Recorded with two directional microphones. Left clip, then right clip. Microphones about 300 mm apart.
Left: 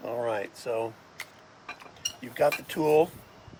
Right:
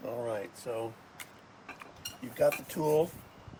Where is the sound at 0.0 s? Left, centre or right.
Centre.